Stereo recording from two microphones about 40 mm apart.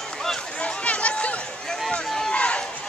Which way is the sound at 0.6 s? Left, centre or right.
Left.